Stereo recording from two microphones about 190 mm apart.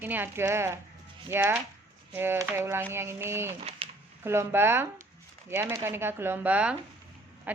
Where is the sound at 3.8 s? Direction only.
30° right (ahead or behind).